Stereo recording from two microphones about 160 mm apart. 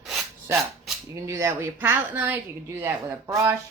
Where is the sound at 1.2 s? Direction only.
20° right (ahead or behind).